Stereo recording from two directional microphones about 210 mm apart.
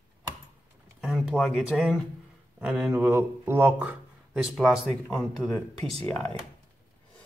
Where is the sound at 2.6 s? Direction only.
5° right (ahead or behind).